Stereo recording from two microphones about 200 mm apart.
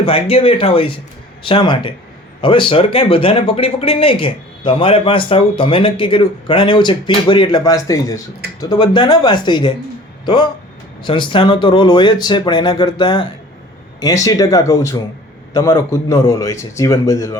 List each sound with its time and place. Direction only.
0.0 s a man's voice: 30° left (ahead or behind)